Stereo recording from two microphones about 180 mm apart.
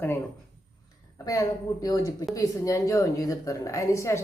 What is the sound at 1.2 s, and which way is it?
A woman's voice, 20° left (ahead or behind).